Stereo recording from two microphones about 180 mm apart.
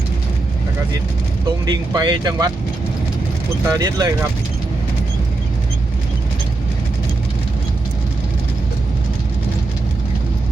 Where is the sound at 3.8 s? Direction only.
20° right (ahead or behind).